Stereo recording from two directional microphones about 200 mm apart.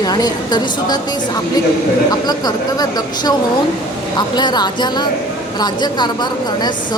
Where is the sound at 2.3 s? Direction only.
20° left (ahead or behind).